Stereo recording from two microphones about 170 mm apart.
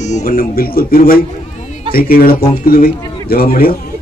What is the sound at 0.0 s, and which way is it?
Speech, 45° left (ahead or behind).